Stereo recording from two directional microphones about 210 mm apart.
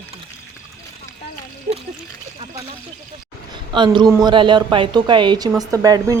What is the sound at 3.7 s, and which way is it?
A man's voice, 20° right (ahead or behind).